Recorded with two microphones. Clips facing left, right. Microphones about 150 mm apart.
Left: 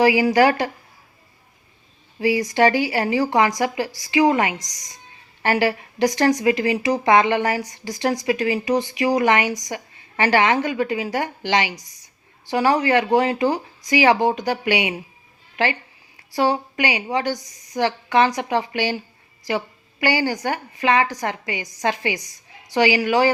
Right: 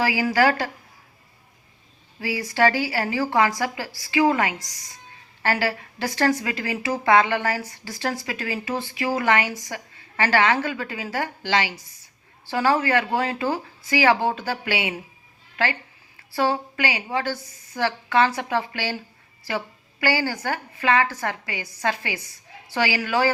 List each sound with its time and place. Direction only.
0.0 s speech: 20° left (ahead or behind)
2.2 s speech: 20° left (ahead or behind)
11.7 s a woman's voice: 40° left (ahead or behind)
12.5 s a woman's voice: 20° left (ahead or behind)